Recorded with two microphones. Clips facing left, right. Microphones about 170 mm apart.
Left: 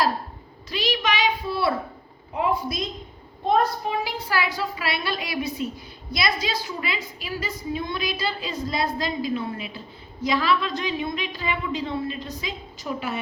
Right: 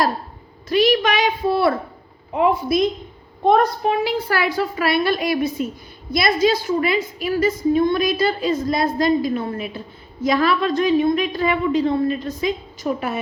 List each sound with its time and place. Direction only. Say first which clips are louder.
0.7 s a woman's voice: right 9 dB; 55° right (ahead or behind)